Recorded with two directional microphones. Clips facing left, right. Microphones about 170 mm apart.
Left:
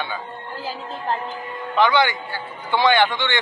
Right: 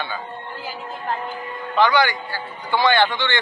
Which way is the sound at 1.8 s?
20° left (ahead or behind).